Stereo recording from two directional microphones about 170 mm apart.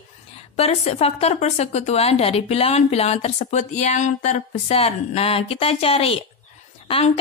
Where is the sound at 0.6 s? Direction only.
35° left (ahead or behind).